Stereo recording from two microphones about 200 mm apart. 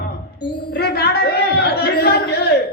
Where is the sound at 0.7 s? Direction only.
55° left (ahead or behind).